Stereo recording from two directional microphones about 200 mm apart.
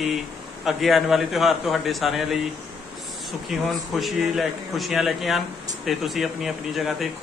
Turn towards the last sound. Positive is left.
turn(degrees=0)  # may be behind; listen again after turning